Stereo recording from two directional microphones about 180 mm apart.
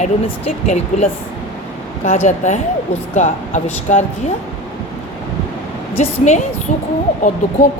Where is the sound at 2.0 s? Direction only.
45° left (ahead or behind).